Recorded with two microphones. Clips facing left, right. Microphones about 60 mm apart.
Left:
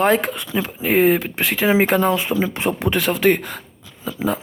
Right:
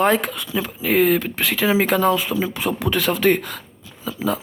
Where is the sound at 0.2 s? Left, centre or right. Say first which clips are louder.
Left 2 dB; left.